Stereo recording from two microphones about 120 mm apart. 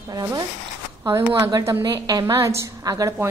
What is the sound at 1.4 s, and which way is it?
A woman's voice, 25° right (ahead or behind).